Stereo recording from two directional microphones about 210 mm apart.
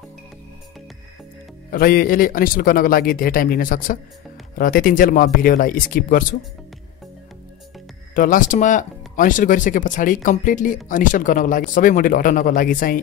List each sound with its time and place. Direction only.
1.7 s speech: 45° left (ahead or behind)
8.1 s speech: 40° left (ahead or behind)